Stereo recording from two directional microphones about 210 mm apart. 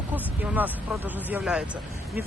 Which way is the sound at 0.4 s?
10° right (ahead or behind).